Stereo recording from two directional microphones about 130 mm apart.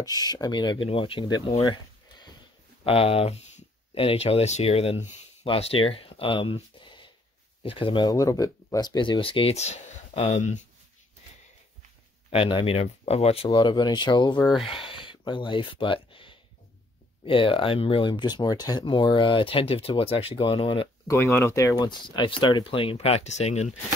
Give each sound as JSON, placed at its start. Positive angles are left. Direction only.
{"t": 0.0, "sound": "speech", "side_deg": 30}
{"t": 1.6, "sound": "a sound", "side_deg": 35}
{"t": 2.8, "sound": "speech", "side_deg": 50}
{"t": 12.3, "sound": "speech", "side_deg": 45}
{"t": 13.5, "sound": "speech", "side_deg": 35}
{"t": 14.7, "sound": "a sound", "side_deg": 40}
{"t": 17.2, "sound": "speech", "side_deg": 45}
{"t": 21.4, "sound": "speech", "side_deg": 20}